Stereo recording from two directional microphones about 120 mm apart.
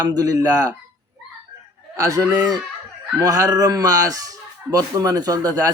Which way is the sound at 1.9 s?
25° right (ahead or behind).